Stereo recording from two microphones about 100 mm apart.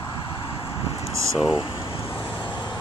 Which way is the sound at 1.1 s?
30° right (ahead or behind).